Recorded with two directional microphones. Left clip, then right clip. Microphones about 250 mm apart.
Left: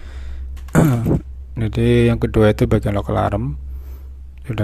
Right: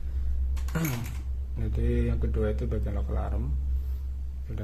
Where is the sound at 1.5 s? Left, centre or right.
Left.